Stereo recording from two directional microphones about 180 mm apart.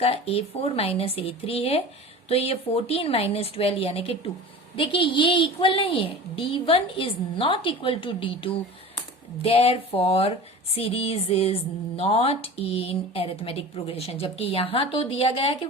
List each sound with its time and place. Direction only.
0.0 s a woman's voice: 30° left (ahead or behind)